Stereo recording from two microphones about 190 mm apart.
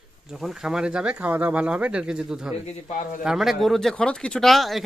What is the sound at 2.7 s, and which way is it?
Speech, 40° left (ahead or behind).